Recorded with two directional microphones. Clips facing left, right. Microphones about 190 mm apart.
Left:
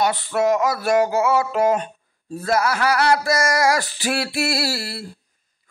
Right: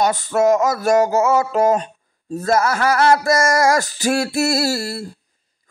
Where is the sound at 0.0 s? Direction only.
45° right (ahead or behind).